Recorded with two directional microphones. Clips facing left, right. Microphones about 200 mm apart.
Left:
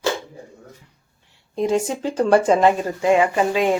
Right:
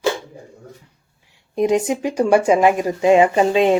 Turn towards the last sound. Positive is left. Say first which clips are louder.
# right 4 dB
turn(degrees=-20)  # may be behind; listen again after turning